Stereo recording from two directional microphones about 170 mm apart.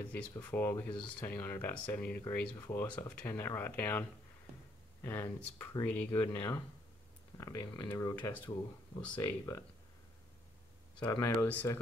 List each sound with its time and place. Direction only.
0.0 s speech: 10° left (ahead or behind)
11.0 s speech: 20° left (ahead or behind)